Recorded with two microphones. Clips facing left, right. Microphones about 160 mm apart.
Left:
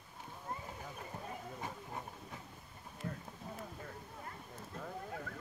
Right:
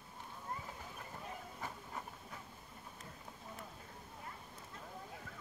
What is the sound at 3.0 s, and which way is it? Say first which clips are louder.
Clip-clop: left 11 dB; 65° left (ahead or behind).